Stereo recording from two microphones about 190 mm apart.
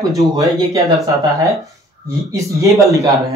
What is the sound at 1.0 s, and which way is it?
Speech, 20° right (ahead or behind).